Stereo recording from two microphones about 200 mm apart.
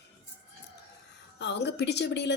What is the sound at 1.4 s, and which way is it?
Speech, 60° left (ahead or behind).